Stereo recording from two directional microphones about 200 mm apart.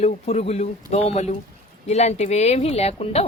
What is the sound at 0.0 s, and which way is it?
A woman's voice, 35° left (ahead or behind).